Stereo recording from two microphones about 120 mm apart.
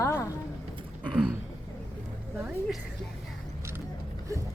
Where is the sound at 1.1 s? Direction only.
5° right (ahead or behind).